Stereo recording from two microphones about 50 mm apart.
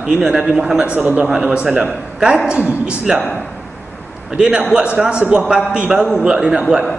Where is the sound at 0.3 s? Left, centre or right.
Right.